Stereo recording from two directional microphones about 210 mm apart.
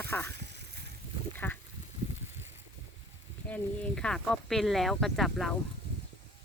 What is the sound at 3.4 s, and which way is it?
Speech, 5° left (ahead or behind).